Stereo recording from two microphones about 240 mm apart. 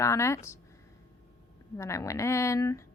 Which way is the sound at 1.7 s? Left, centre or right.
Centre.